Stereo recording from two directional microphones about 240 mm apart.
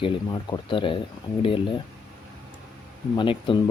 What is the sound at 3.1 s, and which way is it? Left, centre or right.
Speech, left.